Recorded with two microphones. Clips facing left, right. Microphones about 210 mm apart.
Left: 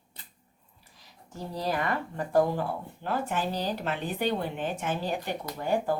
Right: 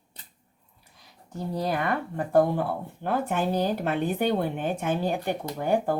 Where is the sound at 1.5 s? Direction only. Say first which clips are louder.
Right 3 dB; 55° right (ahead or behind).